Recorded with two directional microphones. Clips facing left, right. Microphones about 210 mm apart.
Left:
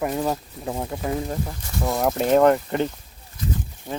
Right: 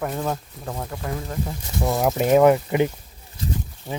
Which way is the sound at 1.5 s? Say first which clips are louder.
Right 2 dB; centre (ahead or behind).